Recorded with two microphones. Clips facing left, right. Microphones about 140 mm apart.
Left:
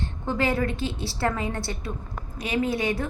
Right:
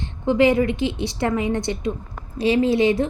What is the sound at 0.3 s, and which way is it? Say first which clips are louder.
A woman's voice: right 8 dB; 20° right (ahead or behind).